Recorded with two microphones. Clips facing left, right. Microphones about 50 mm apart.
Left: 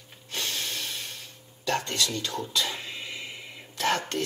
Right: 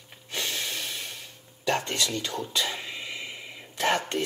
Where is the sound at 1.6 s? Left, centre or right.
Right.